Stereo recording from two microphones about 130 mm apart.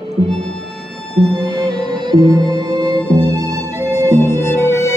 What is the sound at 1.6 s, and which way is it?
Music, 35° right (ahead or behind).